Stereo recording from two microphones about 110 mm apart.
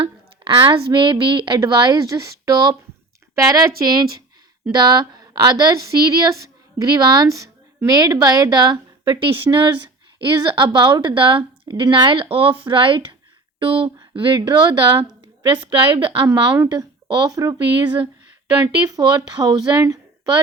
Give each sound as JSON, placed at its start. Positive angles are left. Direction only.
{"t": 0.6, "sound": "a woman's voice", "side_deg": -45}
{"t": 1.5, "sound": "a woman's voice", "side_deg": -30}
{"t": 9.1, "sound": "a woman's voice", "side_deg": -55}
{"t": 14.0, "sound": "a sound", "side_deg": -50}
{"t": 14.3, "sound": "a woman's voice", "side_deg": -40}
{"t": 17.7, "sound": "a woman's voice", "side_deg": -50}
{"t": 18.6, "sound": "a woman's voice", "side_deg": -35}